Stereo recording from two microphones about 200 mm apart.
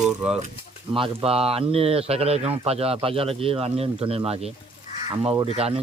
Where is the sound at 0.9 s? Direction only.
25° right (ahead or behind).